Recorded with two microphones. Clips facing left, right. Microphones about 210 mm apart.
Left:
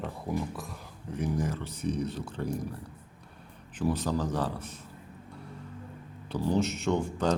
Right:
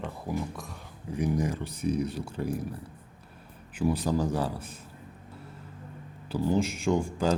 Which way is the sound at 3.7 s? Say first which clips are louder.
Right 2 dB; 10° right (ahead or behind).